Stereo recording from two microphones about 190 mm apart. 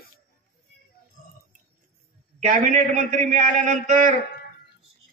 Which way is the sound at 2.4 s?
40° right (ahead or behind).